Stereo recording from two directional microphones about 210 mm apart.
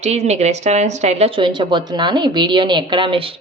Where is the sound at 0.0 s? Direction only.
30° right (ahead or behind).